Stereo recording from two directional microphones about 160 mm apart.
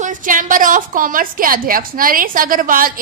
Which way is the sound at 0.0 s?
55° right (ahead or behind).